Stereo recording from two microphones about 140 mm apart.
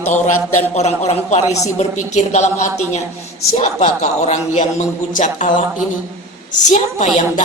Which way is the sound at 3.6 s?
55° left (ahead or behind).